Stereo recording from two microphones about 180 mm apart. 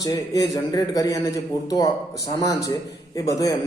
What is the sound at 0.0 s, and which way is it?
A man's voice, 20° left (ahead or behind).